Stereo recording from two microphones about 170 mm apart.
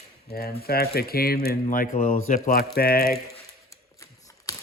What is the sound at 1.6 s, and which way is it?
Speech, 50° left (ahead or behind).